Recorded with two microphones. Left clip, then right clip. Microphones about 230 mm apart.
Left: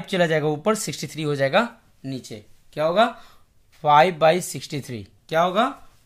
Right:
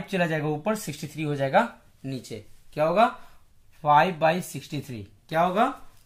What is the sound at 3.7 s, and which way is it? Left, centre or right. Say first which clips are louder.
Speech: left 4 dB; left.